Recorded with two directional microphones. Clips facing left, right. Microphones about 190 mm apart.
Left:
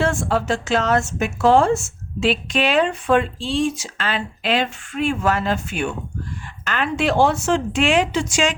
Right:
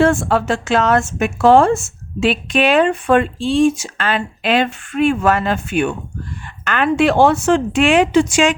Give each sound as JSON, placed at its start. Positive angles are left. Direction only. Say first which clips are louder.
{"t": 0.0, "sound": "speech", "louder": "right 6 dB", "side_deg": -60}